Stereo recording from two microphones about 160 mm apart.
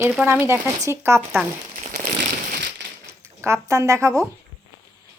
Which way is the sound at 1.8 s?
50° right (ahead or behind).